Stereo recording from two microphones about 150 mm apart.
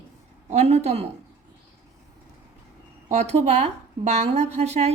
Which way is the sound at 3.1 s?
45° right (ahead or behind).